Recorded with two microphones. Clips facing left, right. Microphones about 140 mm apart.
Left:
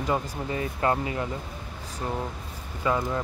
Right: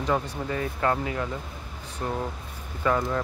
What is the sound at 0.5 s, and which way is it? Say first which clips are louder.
Speech: even; 15° left (ahead or behind).